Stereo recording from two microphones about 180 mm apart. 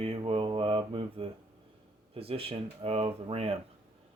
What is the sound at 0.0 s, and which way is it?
Mantra, 30° right (ahead or behind).